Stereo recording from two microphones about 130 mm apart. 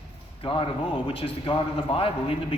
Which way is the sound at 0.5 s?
40° left (ahead or behind).